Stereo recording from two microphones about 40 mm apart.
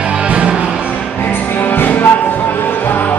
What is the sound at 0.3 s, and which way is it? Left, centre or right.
Music, right.